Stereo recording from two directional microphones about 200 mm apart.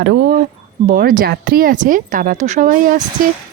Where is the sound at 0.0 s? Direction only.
50° right (ahead or behind).